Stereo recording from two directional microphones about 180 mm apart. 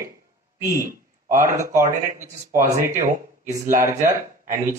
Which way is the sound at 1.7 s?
45° right (ahead or behind).